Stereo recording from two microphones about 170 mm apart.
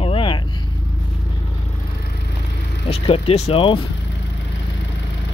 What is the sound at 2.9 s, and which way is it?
Speech, 35° left (ahead or behind).